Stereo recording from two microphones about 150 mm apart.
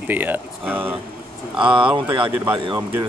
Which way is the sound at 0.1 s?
10° right (ahead or behind).